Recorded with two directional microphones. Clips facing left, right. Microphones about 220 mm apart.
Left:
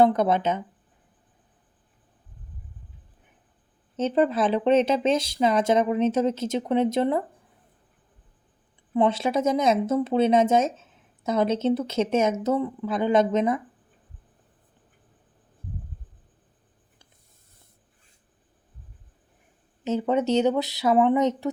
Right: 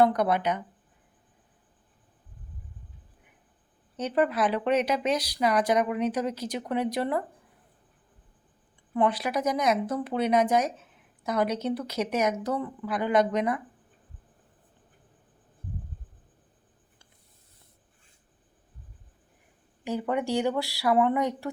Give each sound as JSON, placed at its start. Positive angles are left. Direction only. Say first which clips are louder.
{"t": 0.0, "sound": "speech", "louder": "left 3 dB", "side_deg": 25}
{"t": 3.9, "sound": "speech", "louder": "left 4 dB", "side_deg": 25}
{"t": 8.9, "sound": "speech", "louder": "left 4 dB", "side_deg": 25}
{"t": 19.8, "sound": "speech", "louder": "left 5 dB", "side_deg": 20}